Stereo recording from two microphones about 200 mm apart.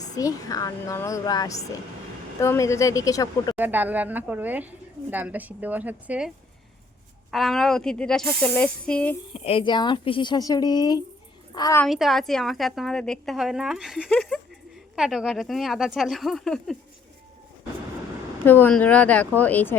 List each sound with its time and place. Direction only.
0.1 s a woman's voice: 15° left (ahead or behind)
3.6 s a woman's voice: 10° right (ahead or behind)
9.3 s a woman's voice: 30° left (ahead or behind)
11.9 s a woman's voice: centre (ahead or behind)
18.4 s a woman's voice: 10° left (ahead or behind)